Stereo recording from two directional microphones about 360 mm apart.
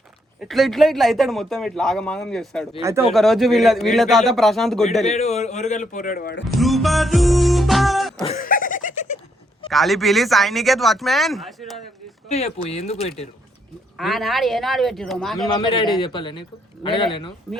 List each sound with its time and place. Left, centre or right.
0.4 s a man's voice: centre
5.0 s a man's voice: centre
6.5 s music: centre
8.2 s a sound: centre
9.6 s a man's voice: centre
12.3 s speech: centre
14.0 s a man's voice: centre
15.4 s speech: centre